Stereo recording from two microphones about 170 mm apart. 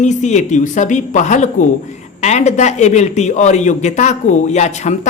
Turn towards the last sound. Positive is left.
turn(degrees=45)  # may be behind; listen again after turning